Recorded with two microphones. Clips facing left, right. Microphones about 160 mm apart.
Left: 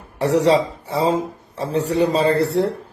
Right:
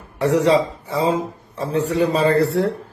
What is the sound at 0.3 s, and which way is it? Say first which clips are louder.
Speech: left 1 dB; 30° left (ahead or behind).